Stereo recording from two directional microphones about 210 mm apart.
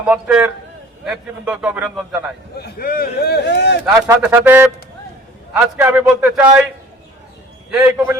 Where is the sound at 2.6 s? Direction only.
45° left (ahead or behind).